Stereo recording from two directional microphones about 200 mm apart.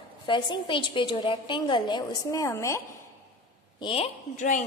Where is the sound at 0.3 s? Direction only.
25° left (ahead or behind).